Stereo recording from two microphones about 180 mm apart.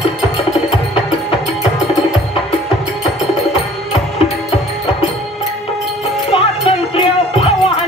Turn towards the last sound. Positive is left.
turn(degrees=30)  # may be behind; listen again after turning